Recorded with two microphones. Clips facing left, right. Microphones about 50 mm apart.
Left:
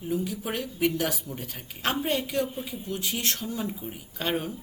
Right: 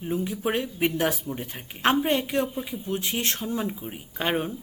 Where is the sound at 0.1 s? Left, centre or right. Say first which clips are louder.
Right 3 dB; right.